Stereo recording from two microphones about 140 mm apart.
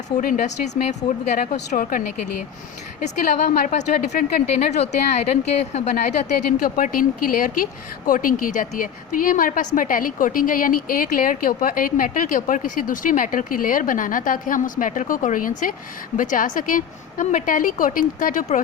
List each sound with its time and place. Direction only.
0.2 s speech: 65° left (ahead or behind)
1.4 s a woman's voice: 75° left (ahead or behind)
3.0 s a woman's voice: 60° left (ahead or behind)